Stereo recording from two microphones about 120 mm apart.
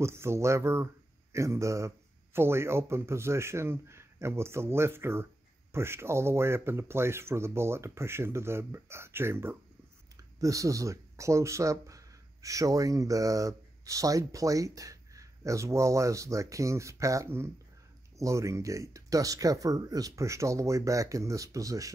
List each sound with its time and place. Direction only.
0.0 s speech: 20° right (ahead or behind)